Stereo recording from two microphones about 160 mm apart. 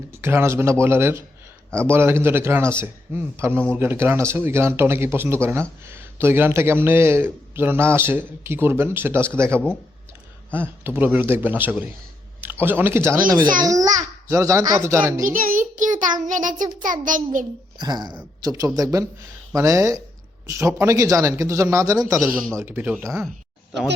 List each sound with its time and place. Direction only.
0.1 s a man's voice: 15° right (ahead or behind)
15.2 s child singing: 60° right (ahead or behind)
16.8 s a child's voice: 55° right (ahead or behind)
17.7 s a man's voice: 25° right (ahead or behind)